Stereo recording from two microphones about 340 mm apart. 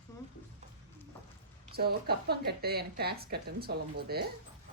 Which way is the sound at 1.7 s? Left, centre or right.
Right.